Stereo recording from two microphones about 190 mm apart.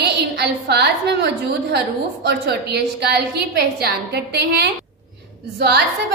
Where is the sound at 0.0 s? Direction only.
60° right (ahead or behind).